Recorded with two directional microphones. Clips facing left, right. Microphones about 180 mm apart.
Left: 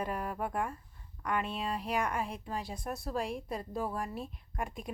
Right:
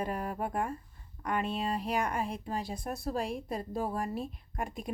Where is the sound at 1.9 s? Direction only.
35° right (ahead or behind).